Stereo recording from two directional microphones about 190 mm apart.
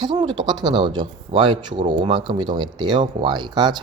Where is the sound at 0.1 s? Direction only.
25° right (ahead or behind).